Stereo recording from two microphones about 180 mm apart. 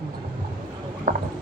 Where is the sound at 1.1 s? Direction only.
50° right (ahead or behind).